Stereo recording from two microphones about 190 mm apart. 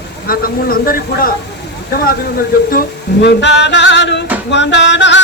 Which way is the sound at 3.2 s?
65° left (ahead or behind).